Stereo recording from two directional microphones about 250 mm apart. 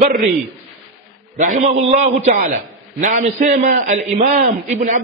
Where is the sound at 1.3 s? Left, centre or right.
Right.